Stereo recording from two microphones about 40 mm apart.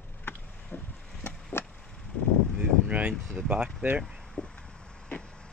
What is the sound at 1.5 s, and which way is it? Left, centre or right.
Chop, left.